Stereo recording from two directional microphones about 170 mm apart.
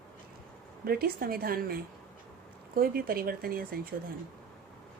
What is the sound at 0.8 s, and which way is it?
Speech, 65° right (ahead or behind).